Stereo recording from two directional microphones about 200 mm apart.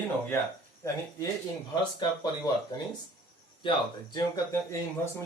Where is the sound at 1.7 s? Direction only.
20° left (ahead or behind).